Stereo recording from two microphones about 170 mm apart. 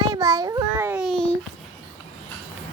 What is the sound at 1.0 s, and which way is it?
Babbling, 5° left (ahead or behind).